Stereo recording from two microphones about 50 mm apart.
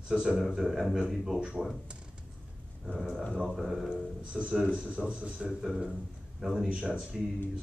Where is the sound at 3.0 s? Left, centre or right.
Centre.